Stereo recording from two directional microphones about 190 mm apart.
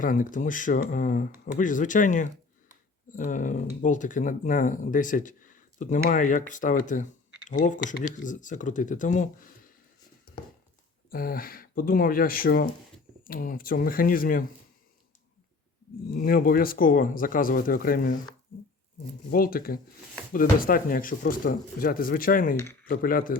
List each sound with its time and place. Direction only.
0.0 s speech: 45° left (ahead or behind)
11.1 s speech: 50° left (ahead or behind)
16.1 s speech: 50° left (ahead or behind)
19.3 s speech: 50° left (ahead or behind)
22.5 s speech: 10° left (ahead or behind)
22.9 s speech: 45° left (ahead or behind)